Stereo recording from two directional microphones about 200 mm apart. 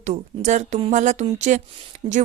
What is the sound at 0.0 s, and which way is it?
Speech, 35° right (ahead or behind).